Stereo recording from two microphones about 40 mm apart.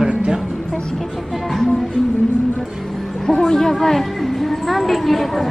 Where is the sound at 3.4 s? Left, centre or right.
Centre.